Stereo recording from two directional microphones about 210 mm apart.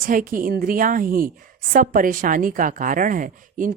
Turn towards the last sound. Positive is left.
turn(degrees=-40)  # may be behind; listen again after turning